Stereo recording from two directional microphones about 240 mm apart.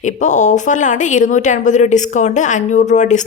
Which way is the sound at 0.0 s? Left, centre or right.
Left.